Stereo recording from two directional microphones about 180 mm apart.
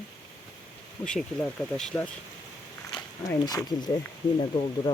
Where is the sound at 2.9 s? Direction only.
20° left (ahead or behind).